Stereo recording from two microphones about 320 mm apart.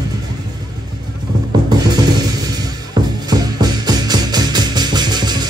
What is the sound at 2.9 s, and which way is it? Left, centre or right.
Music, centre.